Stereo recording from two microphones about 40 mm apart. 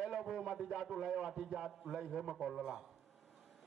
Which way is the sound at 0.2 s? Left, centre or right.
Centre.